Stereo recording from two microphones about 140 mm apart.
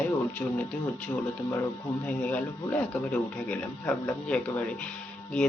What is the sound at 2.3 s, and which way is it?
A man's voice, 10° left (ahead or behind).